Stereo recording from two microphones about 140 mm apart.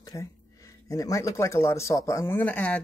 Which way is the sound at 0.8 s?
25° left (ahead or behind).